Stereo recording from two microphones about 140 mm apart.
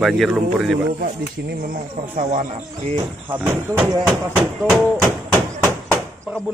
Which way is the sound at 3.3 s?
10° right (ahead or behind).